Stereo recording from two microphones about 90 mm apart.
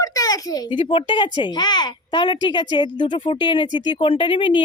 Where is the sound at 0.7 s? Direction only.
70° left (ahead or behind).